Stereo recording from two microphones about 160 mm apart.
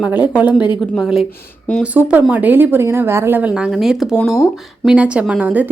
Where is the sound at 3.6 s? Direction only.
5° right (ahead or behind).